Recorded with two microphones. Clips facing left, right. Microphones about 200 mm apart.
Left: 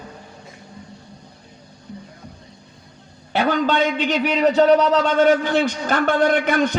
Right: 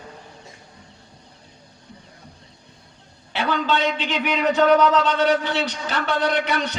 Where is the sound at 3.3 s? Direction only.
45° left (ahead or behind).